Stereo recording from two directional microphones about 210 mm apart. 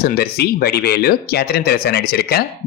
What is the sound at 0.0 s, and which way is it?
Speech, 45° left (ahead or behind).